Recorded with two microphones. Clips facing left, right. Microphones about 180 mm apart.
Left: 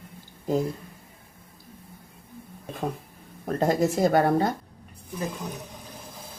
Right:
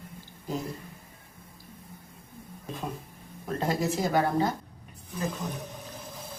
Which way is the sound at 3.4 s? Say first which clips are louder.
Left 6 dB; 45° left (ahead or behind).